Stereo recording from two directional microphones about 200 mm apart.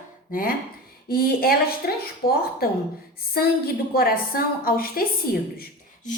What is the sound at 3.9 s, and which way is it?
A woman's voice, 50° left (ahead or behind).